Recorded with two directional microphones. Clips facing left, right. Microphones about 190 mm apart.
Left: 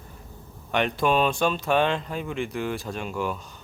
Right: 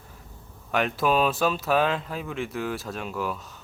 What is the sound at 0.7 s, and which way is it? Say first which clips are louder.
Speech: left 1 dB; centre (ahead or behind).